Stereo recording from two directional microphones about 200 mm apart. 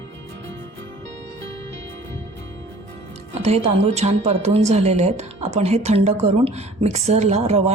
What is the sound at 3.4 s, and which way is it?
A woman's voice, 30° right (ahead or behind).